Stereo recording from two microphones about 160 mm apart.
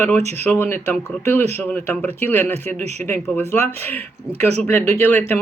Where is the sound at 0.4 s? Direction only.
15° left (ahead or behind).